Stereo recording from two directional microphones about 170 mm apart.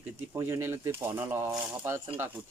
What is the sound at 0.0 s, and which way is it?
Speech, 15° right (ahead or behind).